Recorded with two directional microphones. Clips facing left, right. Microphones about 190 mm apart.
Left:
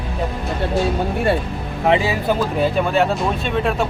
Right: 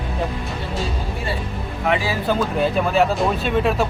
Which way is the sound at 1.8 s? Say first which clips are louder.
Left 4 dB; 25° left (ahead or behind).